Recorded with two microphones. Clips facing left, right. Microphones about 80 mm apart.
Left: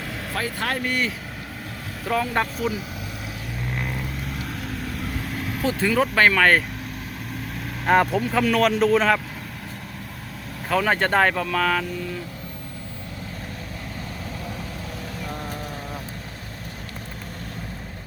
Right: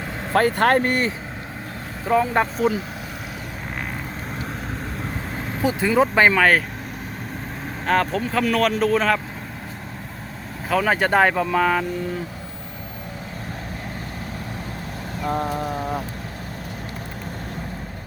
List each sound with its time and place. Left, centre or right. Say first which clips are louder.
0.3 s speech: right 11 dB; right
2.0 s speech: right 4 dB; centre
4.4 s vehicle: right 1 dB; right; by 6.6 s centre
7.9 s speech: left 2 dB; centre
10.7 s speech: right 2 dB; centre
15.4 s a sound: right 8 dB; right